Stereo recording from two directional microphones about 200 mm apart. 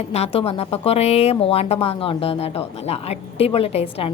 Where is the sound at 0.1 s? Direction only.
30° left (ahead or behind).